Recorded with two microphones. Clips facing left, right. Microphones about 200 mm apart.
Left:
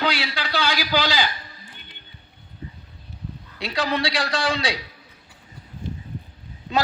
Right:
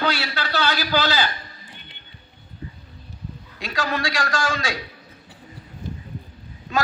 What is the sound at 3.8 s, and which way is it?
Speech, 20° left (ahead or behind).